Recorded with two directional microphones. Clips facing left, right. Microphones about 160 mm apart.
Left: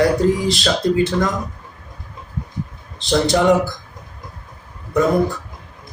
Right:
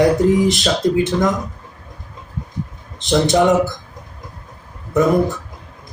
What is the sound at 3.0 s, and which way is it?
Speech, 20° right (ahead or behind).